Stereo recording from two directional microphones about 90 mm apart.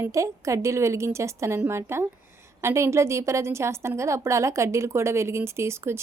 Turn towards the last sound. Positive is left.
turn(degrees=-30)  # may be behind; listen again after turning